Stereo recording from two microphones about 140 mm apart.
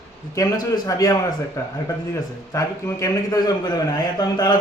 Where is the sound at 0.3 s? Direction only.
25° left (ahead or behind).